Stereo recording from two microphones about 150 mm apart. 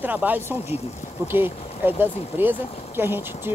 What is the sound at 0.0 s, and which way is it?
Speech, 10° right (ahead or behind).